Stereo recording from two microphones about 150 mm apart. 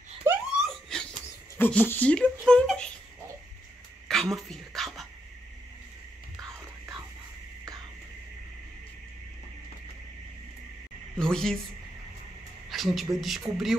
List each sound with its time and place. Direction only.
0.3 s laughter: 15° right (ahead or behind)
0.6 s laughter: 5° left (ahead or behind)
1.6 s speech: 10° left (ahead or behind)
4.1 s dog: centre (ahead or behind)
11.1 s speech: 5° left (ahead or behind)
12.6 s a sound: centre (ahead or behind)
13.2 s speech: centre (ahead or behind)